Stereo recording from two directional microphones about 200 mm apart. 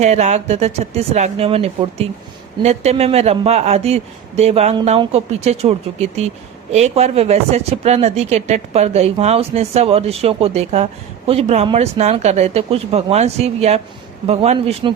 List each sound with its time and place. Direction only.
0.0 s speech: 35° right (ahead or behind)